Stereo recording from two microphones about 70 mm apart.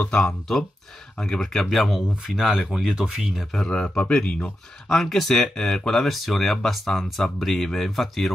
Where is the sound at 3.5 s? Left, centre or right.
Centre.